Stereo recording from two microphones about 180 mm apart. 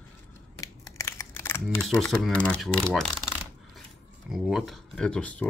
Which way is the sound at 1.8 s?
5° left (ahead or behind).